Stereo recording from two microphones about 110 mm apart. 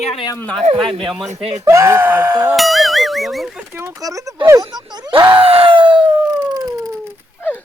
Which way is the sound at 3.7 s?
30° right (ahead or behind).